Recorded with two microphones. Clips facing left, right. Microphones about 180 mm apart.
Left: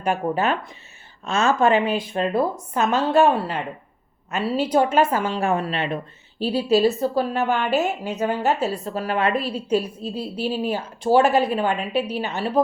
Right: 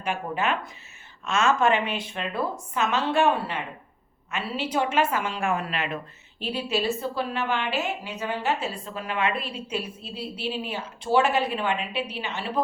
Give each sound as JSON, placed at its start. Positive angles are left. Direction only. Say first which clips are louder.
{"t": 0.0, "sound": "a woman's voice", "louder": "left 6 dB", "side_deg": 40}